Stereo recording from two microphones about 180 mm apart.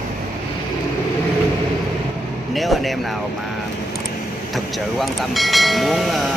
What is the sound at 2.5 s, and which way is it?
Speech, centre (ahead or behind).